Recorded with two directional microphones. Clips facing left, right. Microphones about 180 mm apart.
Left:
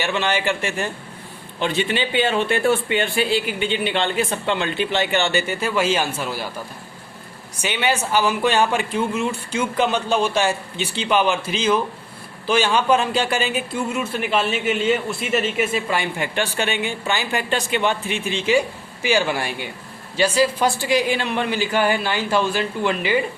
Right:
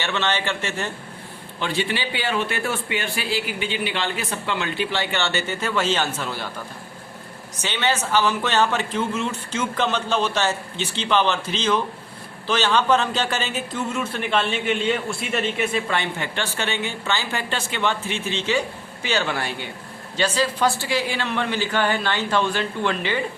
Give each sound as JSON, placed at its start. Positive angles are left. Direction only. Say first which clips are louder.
{"t": 0.0, "sound": "a man's voice", "louder": "left 3 dB", "side_deg": 15}
{"t": 7.6, "sound": "a man's voice", "louder": "left 2 dB", "side_deg": 15}